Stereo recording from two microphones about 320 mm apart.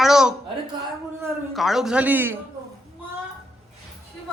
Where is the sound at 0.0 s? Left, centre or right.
Centre.